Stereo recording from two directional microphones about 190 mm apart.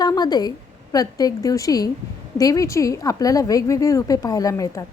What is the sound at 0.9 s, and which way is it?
A woman's voice, 20° left (ahead or behind).